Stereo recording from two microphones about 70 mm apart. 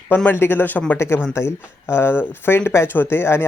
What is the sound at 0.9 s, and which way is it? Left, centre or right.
Speech, left.